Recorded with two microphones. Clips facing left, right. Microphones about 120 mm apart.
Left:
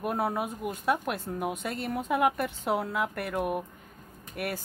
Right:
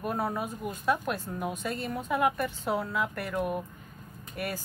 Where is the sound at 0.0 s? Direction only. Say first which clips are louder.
Left 2 dB; 65° left (ahead or behind).